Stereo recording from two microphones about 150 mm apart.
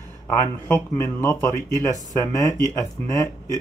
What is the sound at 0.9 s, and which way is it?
Speech, 20° left (ahead or behind).